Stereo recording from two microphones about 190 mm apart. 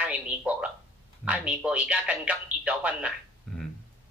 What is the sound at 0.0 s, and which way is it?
Speech, 5° right (ahead or behind).